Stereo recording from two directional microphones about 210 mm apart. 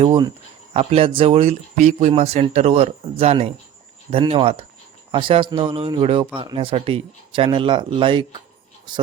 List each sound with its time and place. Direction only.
0.0 s speech: 20° right (ahead or behind)